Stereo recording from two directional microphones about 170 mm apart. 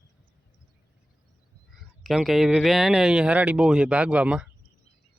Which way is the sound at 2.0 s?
Centre (ahead or behind).